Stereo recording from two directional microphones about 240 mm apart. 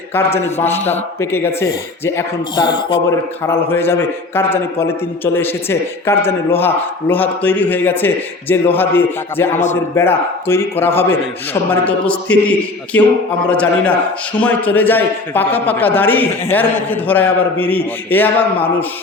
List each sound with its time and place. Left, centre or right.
0.1 s a man's voice: centre